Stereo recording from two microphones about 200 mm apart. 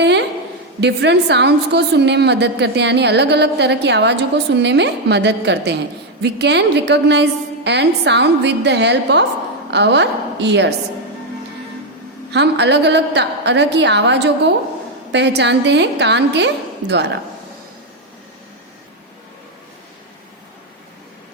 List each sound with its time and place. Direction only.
0.0 s a sound: 60° right (ahead or behind)
0.8 s a woman's voice: 60° right (ahead or behind)
12.3 s a woman's voice: 60° right (ahead or behind)